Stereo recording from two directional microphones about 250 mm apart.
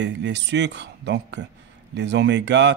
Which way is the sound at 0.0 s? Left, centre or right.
Right.